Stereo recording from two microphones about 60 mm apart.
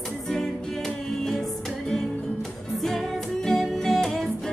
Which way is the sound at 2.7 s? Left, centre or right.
Centre.